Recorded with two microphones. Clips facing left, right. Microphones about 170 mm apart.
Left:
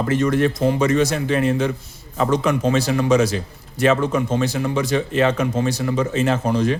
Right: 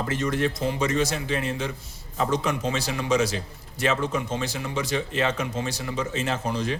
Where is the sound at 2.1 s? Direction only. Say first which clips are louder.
Left 6 dB; 65° left (ahead or behind).